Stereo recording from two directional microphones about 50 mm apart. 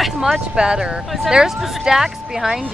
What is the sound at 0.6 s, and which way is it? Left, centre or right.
Speech, centre.